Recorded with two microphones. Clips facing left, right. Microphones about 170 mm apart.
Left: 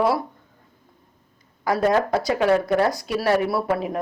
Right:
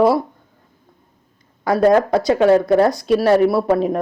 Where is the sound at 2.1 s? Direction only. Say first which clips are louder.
Right 6 dB; 25° right (ahead or behind).